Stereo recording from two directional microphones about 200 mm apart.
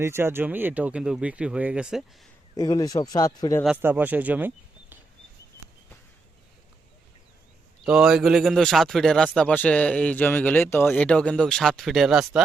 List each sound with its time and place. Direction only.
0.0 s speech: 10° right (ahead or behind)
2.6 s speech: 20° left (ahead or behind)
3.8 s speech: 10° right (ahead or behind)
7.8 s a man's voice: centre (ahead or behind)